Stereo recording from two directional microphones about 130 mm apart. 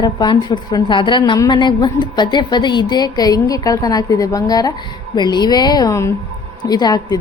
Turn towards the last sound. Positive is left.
turn(degrees=30)  # may be behind; listen again after turning